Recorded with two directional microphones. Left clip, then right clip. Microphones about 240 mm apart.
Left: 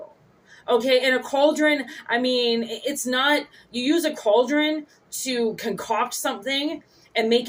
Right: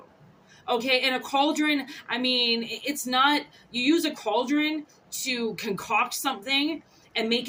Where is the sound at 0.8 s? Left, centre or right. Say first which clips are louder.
Left 3 dB; right.